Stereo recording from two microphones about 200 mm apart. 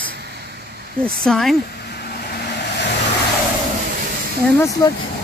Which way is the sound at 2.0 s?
50° left (ahead or behind).